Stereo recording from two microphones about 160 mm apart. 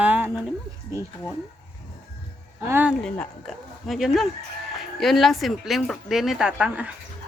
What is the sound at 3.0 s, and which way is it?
Speech, 5° left (ahead or behind).